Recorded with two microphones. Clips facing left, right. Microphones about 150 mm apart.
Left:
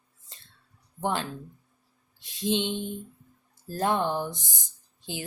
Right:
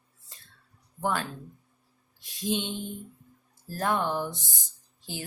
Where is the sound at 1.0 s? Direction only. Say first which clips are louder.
Left 1 dB; 20° left (ahead or behind).